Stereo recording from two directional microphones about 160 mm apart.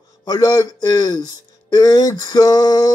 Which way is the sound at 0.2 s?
25° left (ahead or behind).